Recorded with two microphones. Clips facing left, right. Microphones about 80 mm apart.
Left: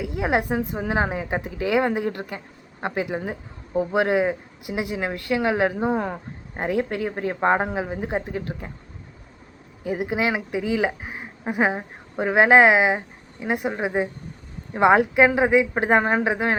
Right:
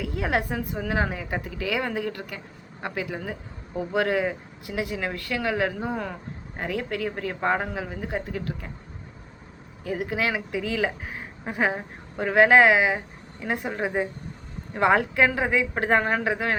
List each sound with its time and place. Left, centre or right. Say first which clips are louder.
0.0 s speech: left 3 dB; centre
9.8 s a woman's voice: left 3 dB; centre